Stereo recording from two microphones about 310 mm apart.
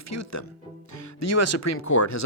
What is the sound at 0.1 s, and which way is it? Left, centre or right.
Speech, left.